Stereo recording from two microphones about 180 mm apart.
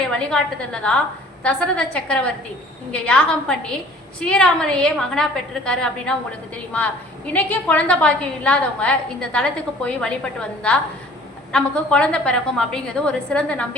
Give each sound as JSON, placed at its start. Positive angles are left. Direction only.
{"t": 0.1, "sound": "a woman's voice", "side_deg": 5}
{"t": 11.5, "sound": "a woman's voice", "side_deg": 5}